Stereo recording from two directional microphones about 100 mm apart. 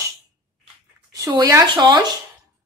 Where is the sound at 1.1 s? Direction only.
35° right (ahead or behind).